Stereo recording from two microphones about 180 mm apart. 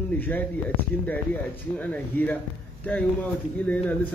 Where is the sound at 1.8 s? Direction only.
10° left (ahead or behind).